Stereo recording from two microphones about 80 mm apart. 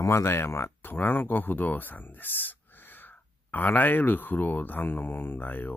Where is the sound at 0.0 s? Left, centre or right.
Left.